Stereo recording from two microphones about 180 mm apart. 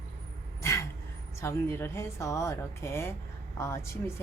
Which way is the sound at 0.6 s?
15° left (ahead or behind).